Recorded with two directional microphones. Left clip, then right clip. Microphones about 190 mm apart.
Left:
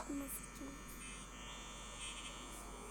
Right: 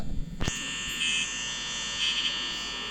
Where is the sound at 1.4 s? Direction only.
60° right (ahead or behind).